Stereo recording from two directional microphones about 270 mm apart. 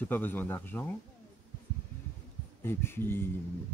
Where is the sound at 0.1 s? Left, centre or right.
Centre.